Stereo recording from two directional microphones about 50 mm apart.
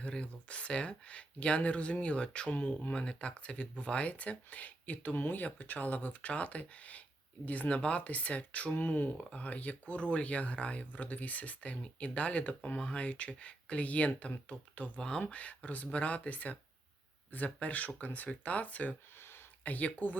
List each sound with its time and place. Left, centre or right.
0.1 s speech: left
19.2 s a sound: left
19.6 s speech: left